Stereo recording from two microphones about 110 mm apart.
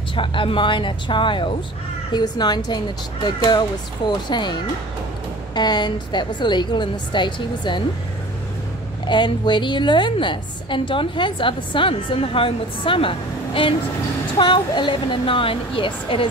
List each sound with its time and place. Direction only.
0.1 s a woman's voice: 50° left (ahead or behind)
9.0 s a woman's voice: 45° left (ahead or behind)